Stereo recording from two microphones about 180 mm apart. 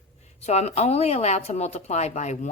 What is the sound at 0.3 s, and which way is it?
Speech, 35° left (ahead or behind).